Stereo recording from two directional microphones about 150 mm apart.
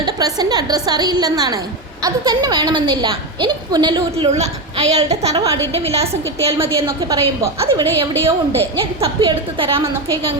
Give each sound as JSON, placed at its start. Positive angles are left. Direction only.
{"t": 0.0, "sound": "a woman's voice", "side_deg": -25}
{"t": 4.3, "sound": "a woman's voice", "side_deg": -45}
{"t": 6.6, "sound": "a woman's voice", "side_deg": -20}
{"t": 7.6, "sound": "a woman's voice", "side_deg": -40}